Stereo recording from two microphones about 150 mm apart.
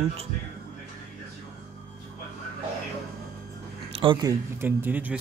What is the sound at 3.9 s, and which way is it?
Speech, 30° right (ahead or behind).